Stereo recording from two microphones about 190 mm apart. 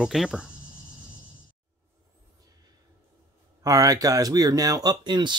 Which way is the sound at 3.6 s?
20° right (ahead or behind).